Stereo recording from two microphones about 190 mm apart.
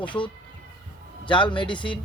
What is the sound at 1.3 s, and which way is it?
Speech, 25° left (ahead or behind).